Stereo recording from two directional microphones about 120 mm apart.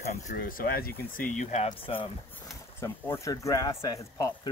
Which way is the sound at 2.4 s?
25° left (ahead or behind).